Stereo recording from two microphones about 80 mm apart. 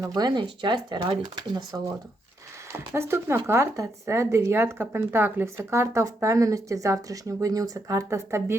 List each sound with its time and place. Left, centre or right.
0.2 s speech: right
2.7 s speech: right